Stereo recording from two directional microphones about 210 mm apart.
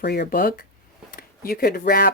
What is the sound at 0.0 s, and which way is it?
Speech, 50° left (ahead or behind).